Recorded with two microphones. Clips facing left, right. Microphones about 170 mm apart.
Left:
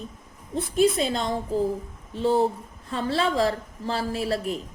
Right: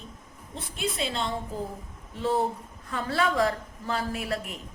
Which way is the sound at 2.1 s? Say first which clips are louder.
Left 5 dB; 30° left (ahead or behind).